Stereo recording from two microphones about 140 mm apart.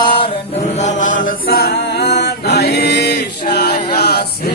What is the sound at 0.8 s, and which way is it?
Chant, 60° left (ahead or behind).